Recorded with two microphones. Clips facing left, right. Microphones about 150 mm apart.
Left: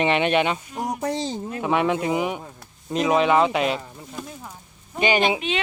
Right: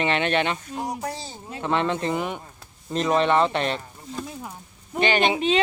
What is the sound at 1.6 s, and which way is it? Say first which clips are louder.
Speech: left 2 dB; 10° left (ahead or behind).